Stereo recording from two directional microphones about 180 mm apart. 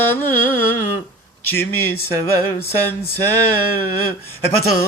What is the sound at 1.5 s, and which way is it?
Male singing, 10° left (ahead or behind).